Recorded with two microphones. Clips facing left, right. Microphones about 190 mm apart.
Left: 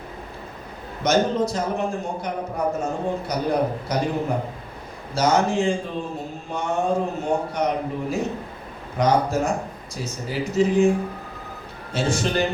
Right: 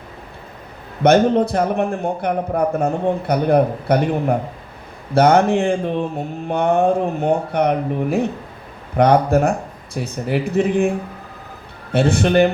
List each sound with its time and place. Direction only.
1.0 s a man's voice: 60° right (ahead or behind)
11.9 s a man's voice: 60° right (ahead or behind)